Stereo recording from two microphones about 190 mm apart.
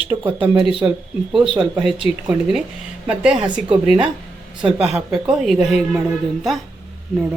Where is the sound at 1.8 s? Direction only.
Centre (ahead or behind).